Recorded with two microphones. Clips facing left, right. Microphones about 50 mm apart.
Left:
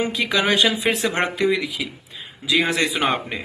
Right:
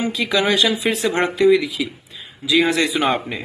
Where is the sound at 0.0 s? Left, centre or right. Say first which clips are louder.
Right 1 dB; left.